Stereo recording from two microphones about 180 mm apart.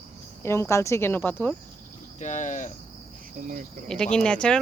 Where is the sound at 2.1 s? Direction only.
40° left (ahead or behind).